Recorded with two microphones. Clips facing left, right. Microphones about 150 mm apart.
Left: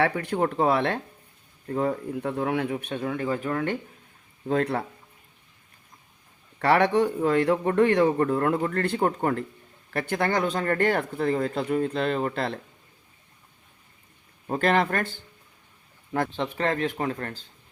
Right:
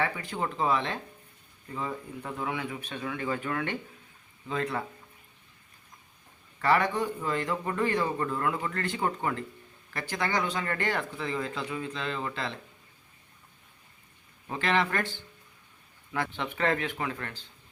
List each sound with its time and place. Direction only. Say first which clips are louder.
0.0 s a man's voice: left 7 dB; 65° left (ahead or behind); by 3.8 s 45° left (ahead or behind)
4.4 s a man's voice: left 7 dB; 65° left (ahead or behind)
6.6 s a man's voice: left 5 dB; 70° left (ahead or behind); by 12.5 s 50° left (ahead or behind)
14.5 s speech: left 5 dB; 50° left (ahead or behind)
16.3 s speech: left 2 dB; 35° left (ahead or behind)